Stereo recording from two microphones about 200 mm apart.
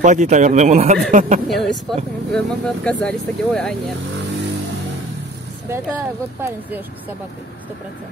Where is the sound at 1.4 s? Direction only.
Centre (ahead or behind).